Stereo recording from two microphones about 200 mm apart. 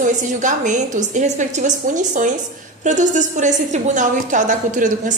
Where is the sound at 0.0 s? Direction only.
40° right (ahead or behind).